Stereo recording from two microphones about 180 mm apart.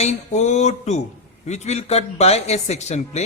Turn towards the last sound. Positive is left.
turn(degrees=40)  # may be behind; listen again after turning